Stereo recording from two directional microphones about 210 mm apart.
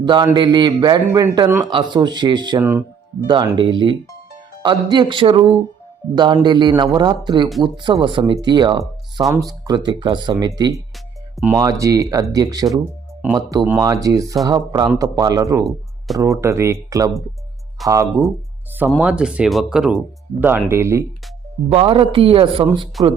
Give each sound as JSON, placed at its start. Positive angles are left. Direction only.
{"t": 0.0, "sound": "a man's voice", "side_deg": -20}
{"t": 18.9, "sound": "speech", "side_deg": -5}
{"t": 21.7, "sound": "a man's voice", "side_deg": -25}